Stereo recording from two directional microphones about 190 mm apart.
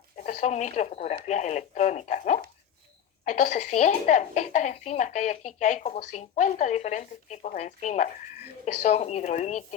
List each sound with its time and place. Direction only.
0.2 s a woman's voice: 40° left (ahead or behind)